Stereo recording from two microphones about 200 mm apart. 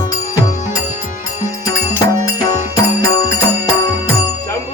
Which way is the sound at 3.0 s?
20° left (ahead or behind).